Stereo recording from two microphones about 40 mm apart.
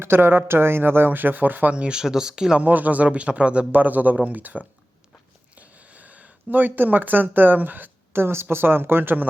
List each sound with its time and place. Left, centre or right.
0.0 s speech: right
1.7 s speech: right
2.6 s speech: right
3.7 s speech: right
5.5 s a sound: right
6.5 s speech: right
8.2 s speech: right